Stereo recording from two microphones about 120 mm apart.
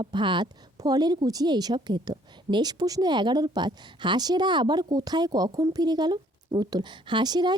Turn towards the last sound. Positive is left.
turn(degrees=-35)  # may be behind; listen again after turning